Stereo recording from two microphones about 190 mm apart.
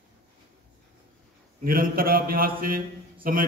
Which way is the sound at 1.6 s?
50° right (ahead or behind).